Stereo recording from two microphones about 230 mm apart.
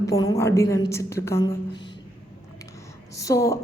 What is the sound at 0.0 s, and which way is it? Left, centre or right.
A woman's voice, centre.